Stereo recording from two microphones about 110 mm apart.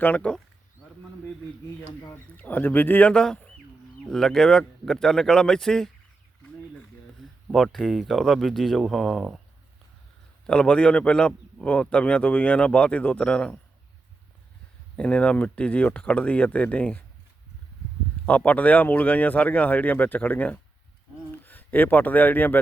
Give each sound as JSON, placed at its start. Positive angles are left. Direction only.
{"t": 0.0, "sound": "a man's voice", "side_deg": 15}
{"t": 2.1, "sound": "a man's voice", "side_deg": 15}
{"t": 7.5, "sound": "speech", "side_deg": 0}
{"t": 10.4, "sound": "a man's voice", "side_deg": 10}
{"t": 14.9, "sound": "a man's voice", "side_deg": 10}
{"t": 18.3, "sound": "a man's voice", "side_deg": 15}